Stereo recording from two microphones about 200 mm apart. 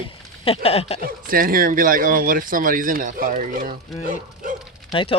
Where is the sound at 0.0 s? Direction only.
30° left (ahead or behind).